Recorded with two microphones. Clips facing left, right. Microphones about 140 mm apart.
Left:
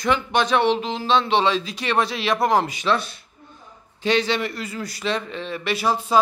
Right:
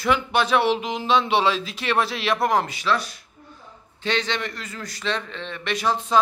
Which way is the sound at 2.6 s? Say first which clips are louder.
Left 2 dB; 20° left (ahead or behind).